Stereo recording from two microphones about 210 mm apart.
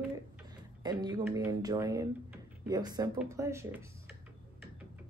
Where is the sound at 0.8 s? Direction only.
20° right (ahead or behind).